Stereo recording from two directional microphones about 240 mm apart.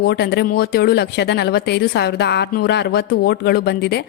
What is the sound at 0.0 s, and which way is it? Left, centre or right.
Speech, left.